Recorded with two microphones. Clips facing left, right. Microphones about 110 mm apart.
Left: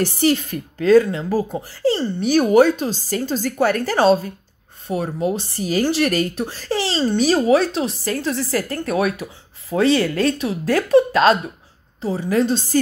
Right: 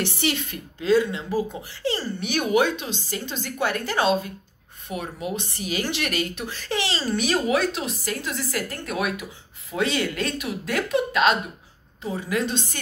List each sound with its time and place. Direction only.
0.0 s speech: 40° left (ahead or behind)